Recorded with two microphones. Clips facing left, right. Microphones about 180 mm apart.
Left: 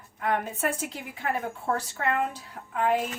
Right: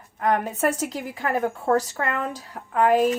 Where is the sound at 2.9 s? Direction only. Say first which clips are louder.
Right 9 dB; 40° right (ahead or behind).